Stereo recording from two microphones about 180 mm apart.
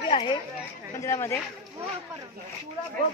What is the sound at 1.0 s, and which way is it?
Speech, 15° left (ahead or behind).